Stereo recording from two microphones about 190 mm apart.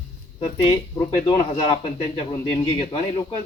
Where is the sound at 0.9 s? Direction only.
25° left (ahead or behind).